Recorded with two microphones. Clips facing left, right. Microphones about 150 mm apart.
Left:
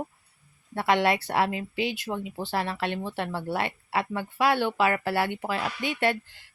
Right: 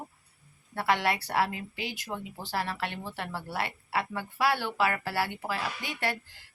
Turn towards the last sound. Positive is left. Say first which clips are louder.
# left 7 dB
turn(degrees=20)  # may be behind; listen again after turning